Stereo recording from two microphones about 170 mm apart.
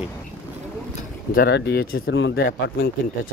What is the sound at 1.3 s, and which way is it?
Speech, 70° left (ahead or behind).